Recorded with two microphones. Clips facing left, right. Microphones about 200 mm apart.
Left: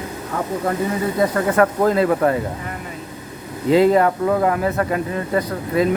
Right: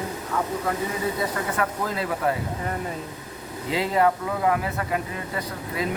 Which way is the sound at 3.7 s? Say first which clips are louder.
Left 8 dB; 50° left (ahead or behind).